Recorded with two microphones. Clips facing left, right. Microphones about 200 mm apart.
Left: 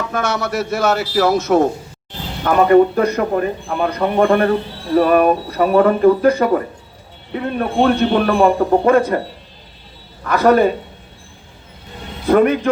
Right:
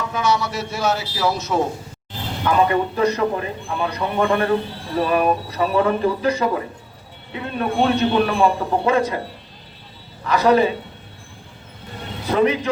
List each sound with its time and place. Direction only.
0.1 s speech: 55° left (ahead or behind)
7.6 s speech: 50° left (ahead or behind)
10.2 s a man's voice: 55° left (ahead or behind)
12.3 s a man's voice: 55° left (ahead or behind)